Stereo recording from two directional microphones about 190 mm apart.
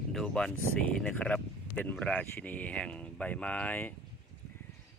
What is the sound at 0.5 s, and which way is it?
Speech, 90° left.